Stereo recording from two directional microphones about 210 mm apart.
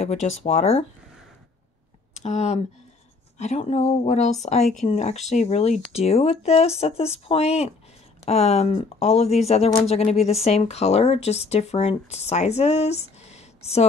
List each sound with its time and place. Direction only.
0.0 s speech: 30° left (ahead or behind)
2.1 s speech: 30° left (ahead or behind)